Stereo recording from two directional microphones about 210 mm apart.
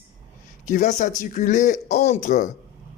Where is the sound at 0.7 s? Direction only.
35° left (ahead or behind).